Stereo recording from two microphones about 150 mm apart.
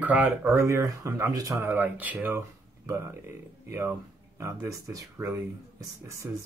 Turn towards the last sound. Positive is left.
turn(degrees=-20)  # may be behind; listen again after turning